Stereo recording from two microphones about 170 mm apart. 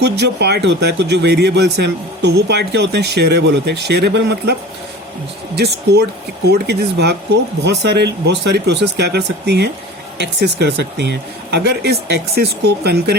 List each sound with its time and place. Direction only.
0.0 s speech: 75° right (ahead or behind)
5.5 s speech: 70° right (ahead or behind)